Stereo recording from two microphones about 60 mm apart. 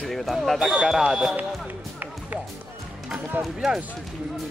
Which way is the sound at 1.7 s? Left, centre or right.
Right.